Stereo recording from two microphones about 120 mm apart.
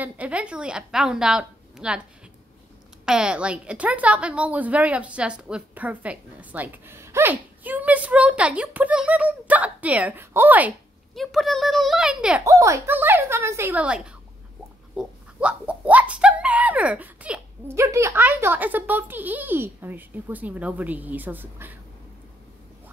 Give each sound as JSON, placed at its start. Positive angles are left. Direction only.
{"t": 0.0, "sound": "a woman's voice", "side_deg": -10}
{"t": 3.1, "sound": "a woman's voice", "side_deg": -5}
{"t": 11.1, "sound": "a child's voice", "side_deg": 0}
{"t": 12.4, "sound": "a woman's voice", "side_deg": -30}
{"t": 17.7, "sound": "a woman's voice", "side_deg": -25}